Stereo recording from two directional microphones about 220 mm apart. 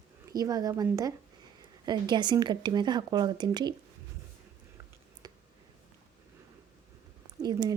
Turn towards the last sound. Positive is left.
turn(degrees=-20)  # may be behind; listen again after turning